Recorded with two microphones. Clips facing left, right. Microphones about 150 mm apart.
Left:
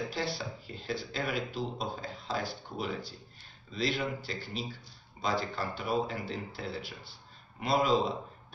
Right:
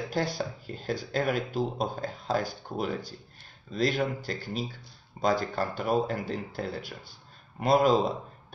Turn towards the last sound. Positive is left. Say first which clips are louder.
# right 5 dB
turn(degrees=-45)  # may be behind; listen again after turning